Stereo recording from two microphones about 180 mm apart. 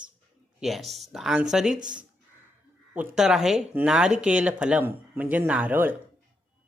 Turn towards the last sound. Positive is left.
turn(degrees=-10)  # may be behind; listen again after turning